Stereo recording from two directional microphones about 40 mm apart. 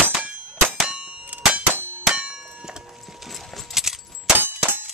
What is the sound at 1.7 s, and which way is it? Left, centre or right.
Clang, right.